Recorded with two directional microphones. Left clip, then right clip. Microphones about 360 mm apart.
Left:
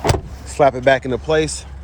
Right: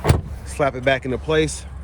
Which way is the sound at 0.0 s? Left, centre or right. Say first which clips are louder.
Left 3 dB; centre.